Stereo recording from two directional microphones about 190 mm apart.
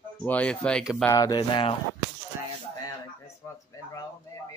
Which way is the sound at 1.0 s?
20° left (ahead or behind).